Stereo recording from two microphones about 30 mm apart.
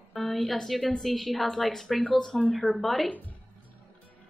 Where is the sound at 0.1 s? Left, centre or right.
Centre.